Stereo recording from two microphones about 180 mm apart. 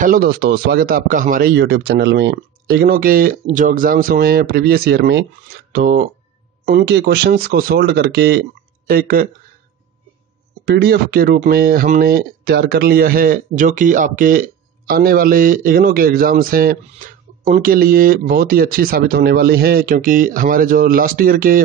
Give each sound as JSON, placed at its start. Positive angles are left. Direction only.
{"t": 0.0, "sound": "speech", "side_deg": -55}
{"t": 8.8, "sound": "speech", "side_deg": -55}
{"t": 10.6, "sound": "speech", "side_deg": -60}